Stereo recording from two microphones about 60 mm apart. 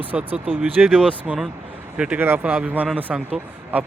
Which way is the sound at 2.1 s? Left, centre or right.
Right.